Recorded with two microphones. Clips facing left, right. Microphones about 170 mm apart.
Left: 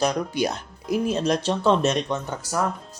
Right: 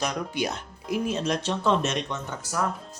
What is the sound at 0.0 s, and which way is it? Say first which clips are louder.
A woman's voice: left 5 dB; 35° left (ahead or behind).